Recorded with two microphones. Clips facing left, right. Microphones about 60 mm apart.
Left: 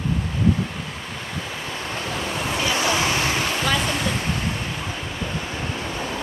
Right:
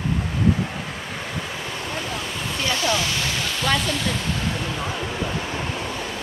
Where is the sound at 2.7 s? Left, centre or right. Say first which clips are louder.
Left 2 dB; left.